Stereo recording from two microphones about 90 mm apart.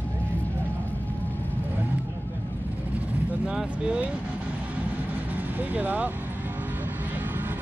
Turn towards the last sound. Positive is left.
turn(degrees=-20)  # may be behind; listen again after turning